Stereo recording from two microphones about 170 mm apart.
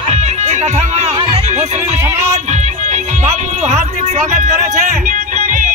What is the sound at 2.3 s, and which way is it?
Music, 40° right (ahead or behind).